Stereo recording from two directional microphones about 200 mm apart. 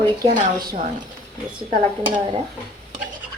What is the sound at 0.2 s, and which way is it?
Speech, 20° right (ahead or behind).